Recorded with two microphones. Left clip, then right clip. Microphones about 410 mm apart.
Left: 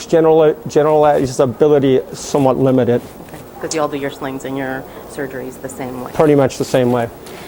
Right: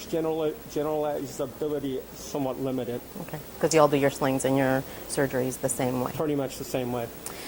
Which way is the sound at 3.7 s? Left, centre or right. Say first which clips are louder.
Left 2 dB; right.